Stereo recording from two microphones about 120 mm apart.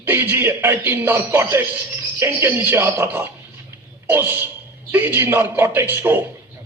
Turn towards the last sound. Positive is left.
turn(degrees=-15)  # may be behind; listen again after turning